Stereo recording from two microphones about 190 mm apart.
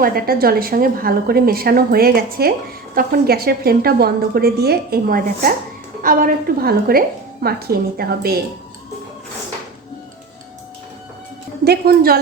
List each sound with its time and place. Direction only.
0.0 s a woman's voice: 50° right (ahead or behind)
11.6 s a woman's voice: 55° right (ahead or behind)